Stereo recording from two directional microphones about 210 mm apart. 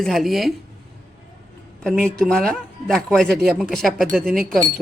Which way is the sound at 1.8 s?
5° left (ahead or behind).